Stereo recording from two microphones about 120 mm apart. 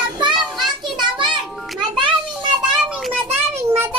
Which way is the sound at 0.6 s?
35° right (ahead or behind).